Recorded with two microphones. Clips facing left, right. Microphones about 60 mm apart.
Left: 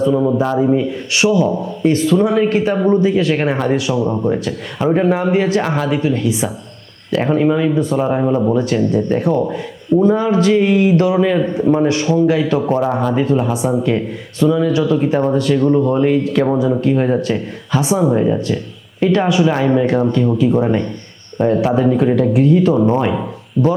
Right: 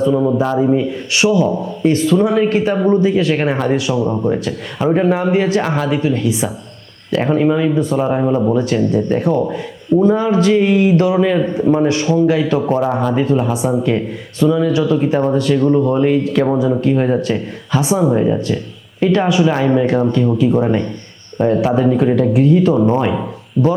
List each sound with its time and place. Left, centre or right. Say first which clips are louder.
0.0 s a man's voice: even; right